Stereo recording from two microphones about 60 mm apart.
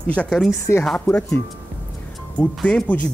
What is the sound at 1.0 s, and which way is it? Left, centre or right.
Speech, left.